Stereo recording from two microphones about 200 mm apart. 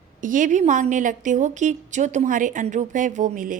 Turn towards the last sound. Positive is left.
turn(degrees=-40)  # may be behind; listen again after turning